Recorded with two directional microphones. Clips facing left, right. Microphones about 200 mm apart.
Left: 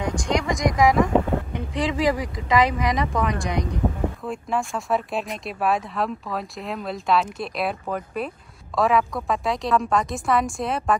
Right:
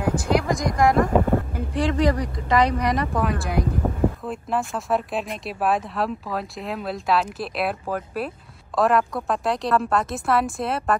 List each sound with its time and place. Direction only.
0.0 s a woman's voice: 5° right (ahead or behind)